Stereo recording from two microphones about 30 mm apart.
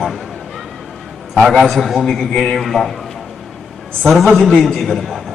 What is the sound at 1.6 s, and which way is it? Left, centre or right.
A man's voice, centre.